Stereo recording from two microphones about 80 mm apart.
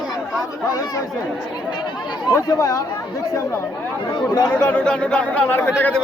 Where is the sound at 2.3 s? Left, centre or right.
Left.